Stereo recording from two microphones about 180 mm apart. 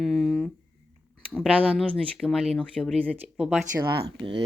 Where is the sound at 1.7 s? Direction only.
Centre (ahead or behind).